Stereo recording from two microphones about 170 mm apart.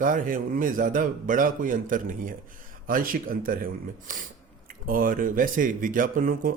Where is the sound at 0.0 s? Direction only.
50° right (ahead or behind).